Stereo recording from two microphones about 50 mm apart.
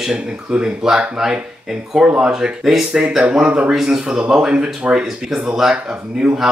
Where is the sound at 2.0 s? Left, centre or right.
Right.